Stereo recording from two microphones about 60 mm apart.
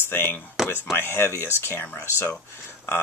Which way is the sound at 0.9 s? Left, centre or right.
Left.